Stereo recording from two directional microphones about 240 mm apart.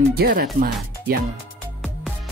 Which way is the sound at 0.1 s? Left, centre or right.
Right.